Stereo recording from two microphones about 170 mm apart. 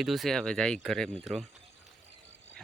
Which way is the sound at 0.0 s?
Centre (ahead or behind).